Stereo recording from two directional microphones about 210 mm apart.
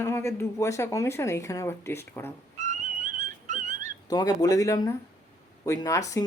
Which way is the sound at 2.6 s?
35° right (ahead or behind).